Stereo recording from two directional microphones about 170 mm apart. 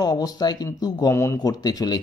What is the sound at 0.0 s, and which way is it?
Speech, 20° left (ahead or behind).